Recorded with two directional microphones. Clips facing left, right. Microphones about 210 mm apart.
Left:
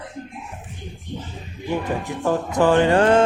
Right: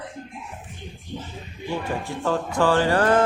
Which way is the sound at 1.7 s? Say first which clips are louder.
Left 3 dB; 20° left (ahead or behind).